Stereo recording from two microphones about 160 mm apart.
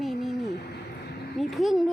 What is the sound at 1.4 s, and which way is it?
Speech, centre (ahead or behind).